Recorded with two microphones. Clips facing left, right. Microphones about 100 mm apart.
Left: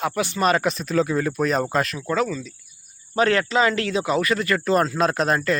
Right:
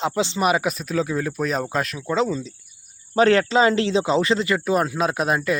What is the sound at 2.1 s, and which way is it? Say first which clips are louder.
Speech: right 1 dB; 25° right (ahead or behind).